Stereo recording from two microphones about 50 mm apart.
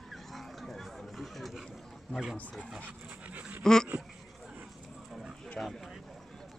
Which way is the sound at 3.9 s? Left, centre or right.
Right.